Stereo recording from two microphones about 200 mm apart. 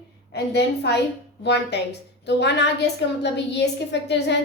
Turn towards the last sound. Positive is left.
turn(degrees=60)  # may be behind; listen again after turning